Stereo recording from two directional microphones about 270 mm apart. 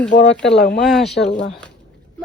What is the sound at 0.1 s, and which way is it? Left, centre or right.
Speech, left.